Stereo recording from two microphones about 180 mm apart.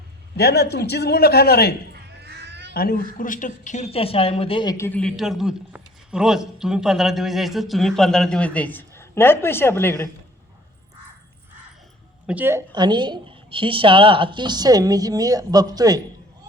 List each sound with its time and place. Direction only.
0.3 s speech: 65° left (ahead or behind)
1.9 s cat: 65° right (ahead or behind)
2.7 s speech: 55° left (ahead or behind); by 4.9 s 20° left (ahead or behind)
4.9 s a man's voice: 5° left (ahead or behind)
12.2 s speech: 10° right (ahead or behind)
12.7 s a woman's voice: 25° right (ahead or behind)